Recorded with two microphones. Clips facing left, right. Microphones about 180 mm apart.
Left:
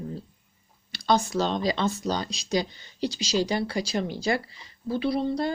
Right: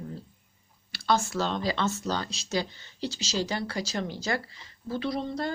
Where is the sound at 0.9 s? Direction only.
20° left (ahead or behind).